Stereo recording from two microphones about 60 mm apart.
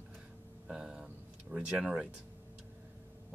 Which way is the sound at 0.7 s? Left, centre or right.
Centre.